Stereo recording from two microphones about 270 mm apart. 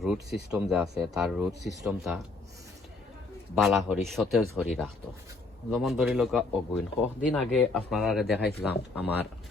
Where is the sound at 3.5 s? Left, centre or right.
Centre.